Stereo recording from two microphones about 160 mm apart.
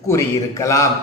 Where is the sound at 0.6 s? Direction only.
20° left (ahead or behind).